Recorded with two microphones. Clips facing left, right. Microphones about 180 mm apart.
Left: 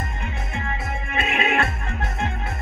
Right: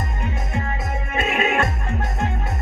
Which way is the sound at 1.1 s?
45° right (ahead or behind).